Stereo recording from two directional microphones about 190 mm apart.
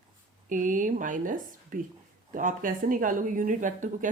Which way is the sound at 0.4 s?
45° right (ahead or behind).